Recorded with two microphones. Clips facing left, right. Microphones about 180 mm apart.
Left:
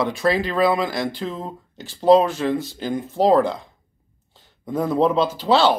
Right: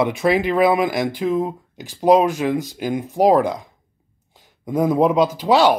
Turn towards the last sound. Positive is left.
turn(degrees=-15)  # may be behind; listen again after turning